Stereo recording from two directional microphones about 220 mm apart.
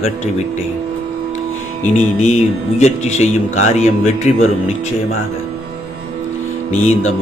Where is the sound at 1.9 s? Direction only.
30° left (ahead or behind).